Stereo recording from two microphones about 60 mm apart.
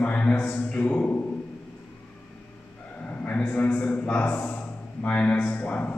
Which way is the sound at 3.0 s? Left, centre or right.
Left.